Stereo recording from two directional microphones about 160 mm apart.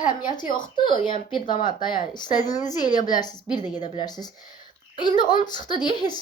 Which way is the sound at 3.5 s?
25° left (ahead or behind).